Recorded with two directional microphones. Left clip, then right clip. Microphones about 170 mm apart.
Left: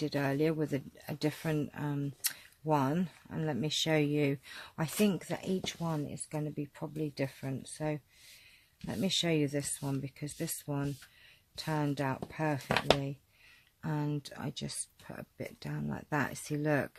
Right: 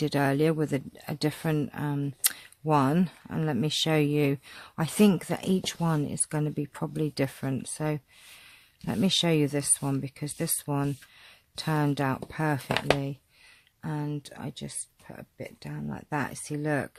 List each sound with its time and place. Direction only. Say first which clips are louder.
0.0 s speech: right 6 dB; 40° right (ahead or behind)
13.8 s speech: right 2 dB; 15° right (ahead or behind)